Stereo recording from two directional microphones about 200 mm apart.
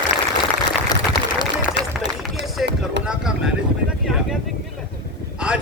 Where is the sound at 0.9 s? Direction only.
20° left (ahead or behind).